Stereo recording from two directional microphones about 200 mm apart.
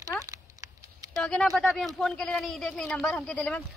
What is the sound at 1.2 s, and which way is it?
Speech, centre (ahead or behind).